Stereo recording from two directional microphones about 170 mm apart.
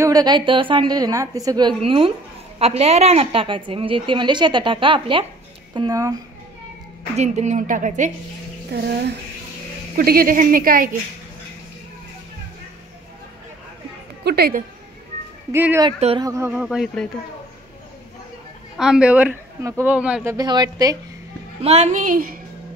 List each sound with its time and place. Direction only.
0.0 s a woman's voice: 20° right (ahead or behind)
7.2 s a woman's voice: 45° right (ahead or behind)
8.7 s speech: 70° right (ahead or behind)
9.9 s speech: 60° right (ahead or behind)
14.2 s speech: 65° right (ahead or behind)
15.5 s speech: 15° right (ahead or behind)
16.6 s speech: centre (ahead or behind)
18.8 s speech: 5° right (ahead or behind)
20.3 s a woman's voice: 25° right (ahead or behind)
21.5 s a woman's voice: 40° right (ahead or behind); by 22.4 s 55° right (ahead or behind)